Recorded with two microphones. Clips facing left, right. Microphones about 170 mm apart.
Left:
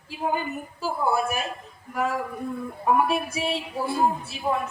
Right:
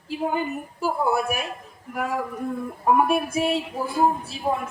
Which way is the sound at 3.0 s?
50° right (ahead or behind).